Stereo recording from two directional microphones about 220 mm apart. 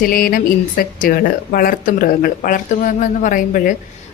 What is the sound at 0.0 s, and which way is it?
Speech, 40° left (ahead or behind).